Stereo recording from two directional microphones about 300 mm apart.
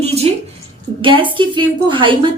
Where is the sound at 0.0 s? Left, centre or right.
Right.